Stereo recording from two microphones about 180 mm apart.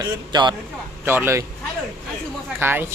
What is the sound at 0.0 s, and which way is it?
Speech, 25° right (ahead or behind).